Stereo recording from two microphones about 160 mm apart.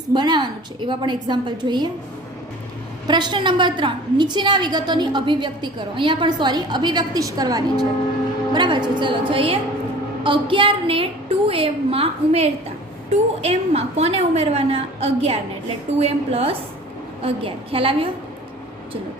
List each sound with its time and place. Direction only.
0.1 s a woman's voice: 30° right (ahead or behind)
3.1 s a woman's voice: 25° right (ahead or behind)